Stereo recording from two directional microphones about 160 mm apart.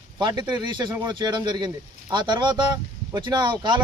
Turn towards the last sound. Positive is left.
turn(degrees=-30)  # may be behind; listen again after turning